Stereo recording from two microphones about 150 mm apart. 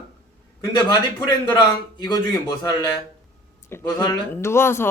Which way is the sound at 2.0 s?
30° left (ahead or behind).